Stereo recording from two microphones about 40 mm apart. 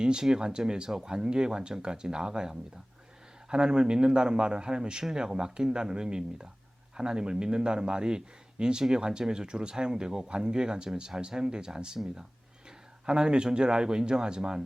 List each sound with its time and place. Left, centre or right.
0.0 s a man's voice: centre
13.1 s a man's voice: right